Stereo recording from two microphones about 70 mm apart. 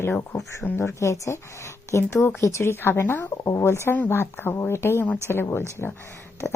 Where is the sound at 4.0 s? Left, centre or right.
Left.